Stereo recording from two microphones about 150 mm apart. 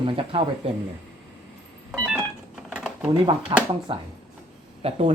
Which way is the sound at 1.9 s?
5° right (ahead or behind).